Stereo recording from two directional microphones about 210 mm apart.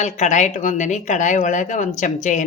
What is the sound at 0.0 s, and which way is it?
Speech, 35° left (ahead or behind).